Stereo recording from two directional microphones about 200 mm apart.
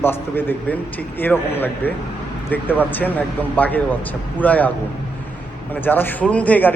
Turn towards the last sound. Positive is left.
turn(degrees=5)  # may be behind; listen again after turning